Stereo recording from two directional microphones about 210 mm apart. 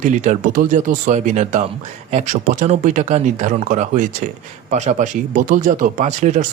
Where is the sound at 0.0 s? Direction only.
35° right (ahead or behind).